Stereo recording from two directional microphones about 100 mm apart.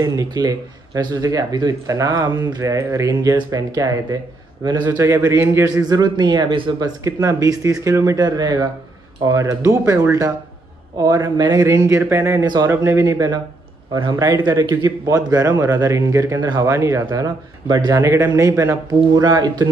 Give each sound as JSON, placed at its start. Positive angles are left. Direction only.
{"t": 0.0, "sound": "speech", "side_deg": -35}
{"t": 4.6, "sound": "speech", "side_deg": -45}
{"t": 4.9, "sound": "a man's voice", "side_deg": -25}
{"t": 5.9, "sound": "speech", "side_deg": -45}
{"t": 6.8, "sound": "speech", "side_deg": -35}
{"t": 9.2, "sound": "a man's voice", "side_deg": -35}
{"t": 14.3, "sound": "speech", "side_deg": -50}
{"t": 16.3, "sound": "speech", "side_deg": -45}
{"t": 16.6, "sound": "speech", "side_deg": -30}
{"t": 18.0, "sound": "a man's voice", "side_deg": -25}
{"t": 18.9, "sound": "speech", "side_deg": -40}